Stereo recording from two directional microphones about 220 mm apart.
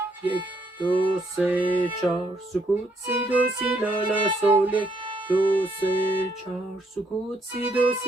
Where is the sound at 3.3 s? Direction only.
5° right (ahead or behind).